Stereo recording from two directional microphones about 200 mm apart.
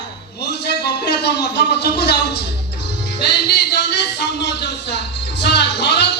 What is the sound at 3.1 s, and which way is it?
Music, 55° left (ahead or behind).